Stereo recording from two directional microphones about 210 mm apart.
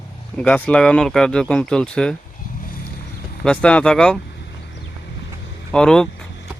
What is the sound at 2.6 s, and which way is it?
Vehicle, 40° left (ahead or behind).